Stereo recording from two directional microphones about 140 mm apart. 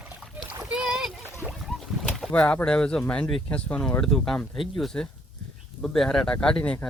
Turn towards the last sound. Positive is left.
turn(degrees=10)  # may be behind; listen again after turning